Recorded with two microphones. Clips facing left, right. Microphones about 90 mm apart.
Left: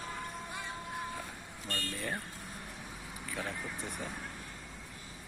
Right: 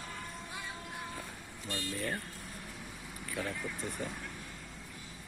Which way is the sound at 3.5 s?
15° left (ahead or behind).